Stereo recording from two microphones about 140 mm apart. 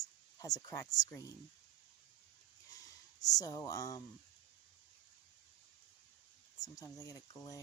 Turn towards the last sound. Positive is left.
turn(degrees=25)  # may be behind; listen again after turning